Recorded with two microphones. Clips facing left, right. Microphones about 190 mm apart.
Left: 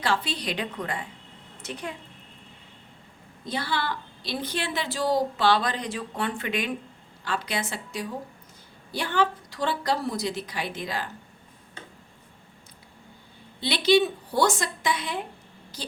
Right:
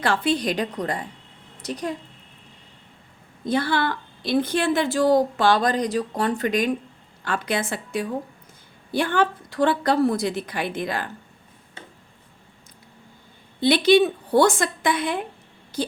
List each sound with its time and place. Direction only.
0.0 s a woman's voice: 55° right (ahead or behind)
3.4 s a woman's voice: 50° right (ahead or behind)
7.3 s a woman's voice: 50° right (ahead or behind)
13.6 s a woman's voice: 50° right (ahead or behind)